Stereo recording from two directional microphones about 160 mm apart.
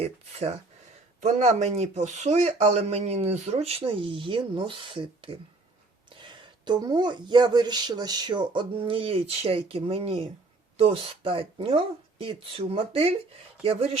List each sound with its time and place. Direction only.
0.0 s speech: 40° right (ahead or behind)
6.7 s speech: 25° right (ahead or behind)